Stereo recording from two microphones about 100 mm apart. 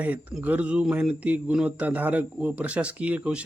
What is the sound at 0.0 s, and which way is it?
Speech, 15° right (ahead or behind).